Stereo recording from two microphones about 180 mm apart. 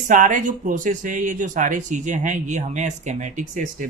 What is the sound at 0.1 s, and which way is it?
Speech, 45° right (ahead or behind).